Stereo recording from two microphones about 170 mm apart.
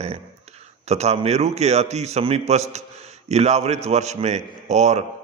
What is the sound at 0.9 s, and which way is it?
A man's voice, 40° right (ahead or behind).